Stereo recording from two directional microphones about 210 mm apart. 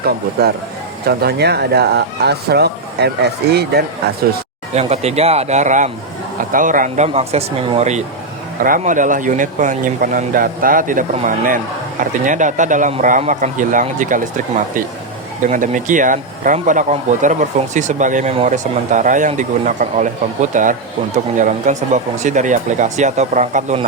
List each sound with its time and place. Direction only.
0.0 s speech: 50° right (ahead or behind)
4.7 s speech: 30° right (ahead or behind)